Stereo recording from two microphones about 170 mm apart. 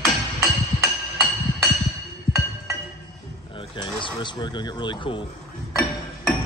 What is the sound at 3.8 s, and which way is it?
Speech, 30° left (ahead or behind).